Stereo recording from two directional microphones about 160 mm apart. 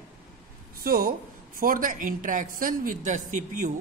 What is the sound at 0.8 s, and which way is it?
A man's voice, 70° right (ahead or behind).